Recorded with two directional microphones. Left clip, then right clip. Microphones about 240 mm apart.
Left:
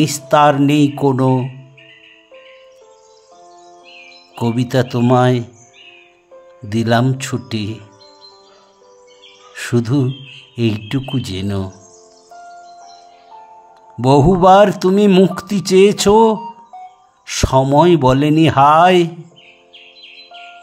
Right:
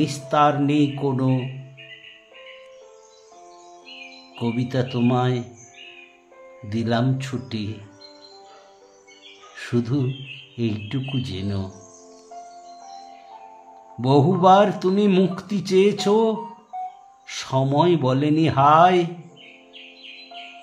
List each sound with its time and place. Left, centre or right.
0.0 s speech: left
4.4 s speech: left
6.7 s speech: left
9.6 s speech: left
14.0 s speech: left